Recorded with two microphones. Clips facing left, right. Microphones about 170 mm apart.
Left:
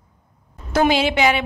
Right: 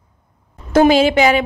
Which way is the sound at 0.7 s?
45° right (ahead or behind).